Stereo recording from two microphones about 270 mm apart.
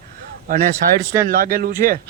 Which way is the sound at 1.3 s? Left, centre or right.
Right.